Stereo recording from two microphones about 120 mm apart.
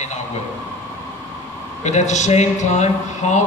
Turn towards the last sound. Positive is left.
turn(degrees=80)